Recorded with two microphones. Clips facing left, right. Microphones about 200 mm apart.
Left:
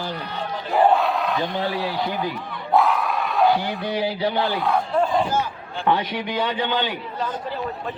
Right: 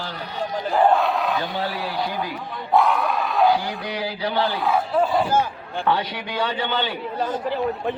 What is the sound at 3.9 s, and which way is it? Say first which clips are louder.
Speech: left 4 dB; 20° left (ahead or behind).